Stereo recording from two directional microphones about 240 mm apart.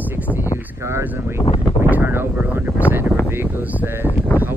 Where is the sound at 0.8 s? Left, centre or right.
Centre.